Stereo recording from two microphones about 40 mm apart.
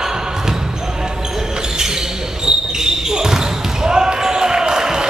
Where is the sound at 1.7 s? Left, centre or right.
Centre.